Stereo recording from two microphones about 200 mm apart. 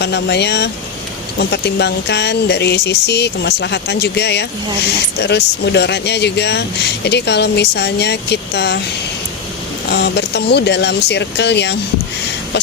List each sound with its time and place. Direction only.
0.0 s speech: 55° left (ahead or behind)
9.9 s speech: 55° left (ahead or behind)